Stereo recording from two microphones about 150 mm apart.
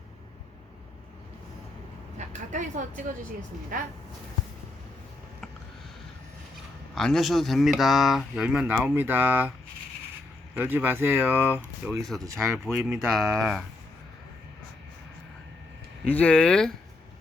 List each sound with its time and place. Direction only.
2.1 s speech: 55° right (ahead or behind)
3.7 s speech: 65° right (ahead or behind)
6.9 s speech: centre (ahead or behind)
10.5 s speech: 10° right (ahead or behind)
12.6 s speech: 5° right (ahead or behind)
16.0 s speech: 10° left (ahead or behind)